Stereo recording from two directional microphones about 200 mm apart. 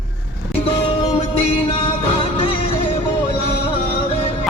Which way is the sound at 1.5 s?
30° left (ahead or behind).